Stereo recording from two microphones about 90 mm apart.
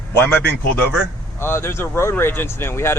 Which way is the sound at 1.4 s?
30° left (ahead or behind).